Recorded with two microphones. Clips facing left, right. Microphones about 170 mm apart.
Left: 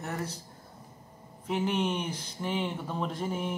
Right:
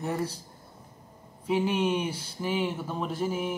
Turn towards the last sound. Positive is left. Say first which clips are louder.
# right 3 dB
turn(degrees=-5)  # may be behind; listen again after turning